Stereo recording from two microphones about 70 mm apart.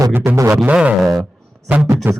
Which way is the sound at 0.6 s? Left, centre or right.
Centre.